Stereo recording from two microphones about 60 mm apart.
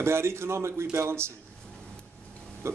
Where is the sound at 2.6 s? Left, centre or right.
Right.